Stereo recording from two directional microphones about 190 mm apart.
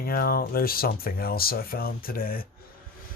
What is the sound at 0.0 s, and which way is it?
Speech, 50° left (ahead or behind).